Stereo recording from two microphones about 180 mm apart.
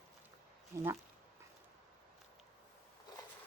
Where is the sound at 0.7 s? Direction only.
15° right (ahead or behind).